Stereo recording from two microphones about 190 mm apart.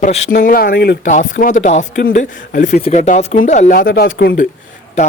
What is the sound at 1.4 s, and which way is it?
Speech, 40° left (ahead or behind).